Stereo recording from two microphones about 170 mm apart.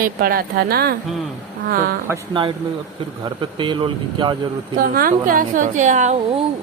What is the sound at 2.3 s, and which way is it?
Speech, 30° right (ahead or behind).